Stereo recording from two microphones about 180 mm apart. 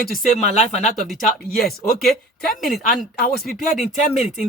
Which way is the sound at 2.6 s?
55° left (ahead or behind).